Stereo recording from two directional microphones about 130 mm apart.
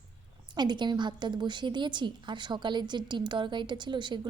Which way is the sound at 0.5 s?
35° right (ahead or behind).